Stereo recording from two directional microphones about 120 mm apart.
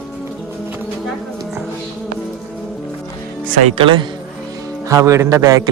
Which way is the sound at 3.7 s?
45° right (ahead or behind).